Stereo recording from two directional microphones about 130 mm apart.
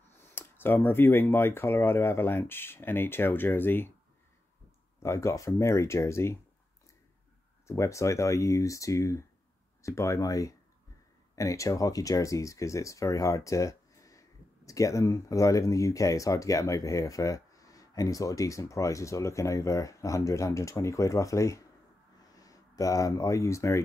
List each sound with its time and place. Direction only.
0.3 s speech: 15° left (ahead or behind)
5.0 s speech: 25° left (ahead or behind)
7.6 s speech: 20° left (ahead or behind)